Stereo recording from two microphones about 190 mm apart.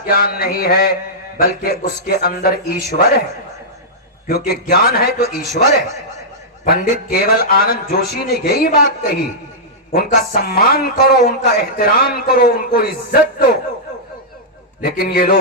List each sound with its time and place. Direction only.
0.0 s speech: 55° left (ahead or behind)
4.3 s speech: 55° left (ahead or behind)
6.7 s speech: 50° left (ahead or behind)
9.9 s speech: 55° left (ahead or behind)
14.8 s speech: 55° left (ahead or behind)